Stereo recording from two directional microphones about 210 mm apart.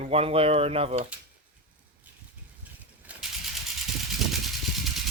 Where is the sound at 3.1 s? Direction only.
5° right (ahead or behind).